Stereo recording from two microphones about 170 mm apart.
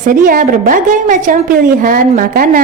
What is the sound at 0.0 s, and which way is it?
A woman's voice, 55° right (ahead or behind).